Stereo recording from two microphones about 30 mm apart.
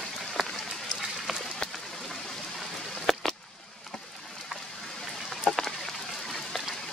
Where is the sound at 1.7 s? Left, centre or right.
Centre.